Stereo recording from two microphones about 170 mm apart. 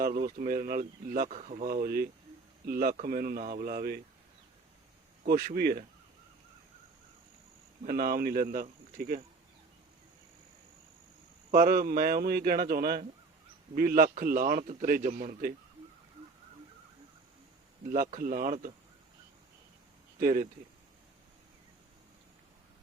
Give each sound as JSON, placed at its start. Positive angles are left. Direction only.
{"t": 0.0, "sound": "speech", "side_deg": -60}
{"t": 5.2, "sound": "speech", "side_deg": -55}
{"t": 7.9, "sound": "speech", "side_deg": -60}
{"t": 11.5, "sound": "speech", "side_deg": -55}
{"t": 17.8, "sound": "speech", "side_deg": -55}
{"t": 20.1, "sound": "speech", "side_deg": -55}